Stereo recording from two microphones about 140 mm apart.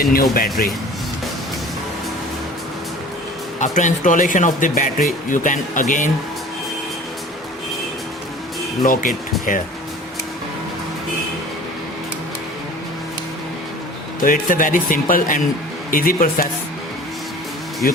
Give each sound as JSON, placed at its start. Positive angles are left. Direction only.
{"t": 0.0, "sound": "a man's voice", "side_deg": 90}
{"t": 3.6, "sound": "speech", "side_deg": 65}
{"t": 5.3, "sound": "speech", "side_deg": 70}
{"t": 8.8, "sound": "speech", "side_deg": 75}
{"t": 14.2, "sound": "speech", "side_deg": 75}
{"t": 15.9, "sound": "a man's voice", "side_deg": 90}
{"t": 17.8, "sound": "a man's voice", "side_deg": 90}